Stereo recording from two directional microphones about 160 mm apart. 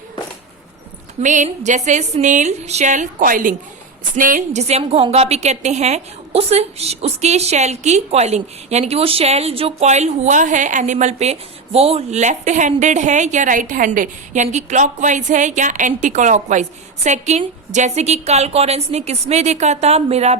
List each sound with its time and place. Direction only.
1.2 s a woman's voice: 50° right (ahead or behind)